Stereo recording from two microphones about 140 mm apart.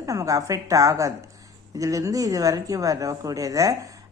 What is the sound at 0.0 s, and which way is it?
Speech, 25° right (ahead or behind).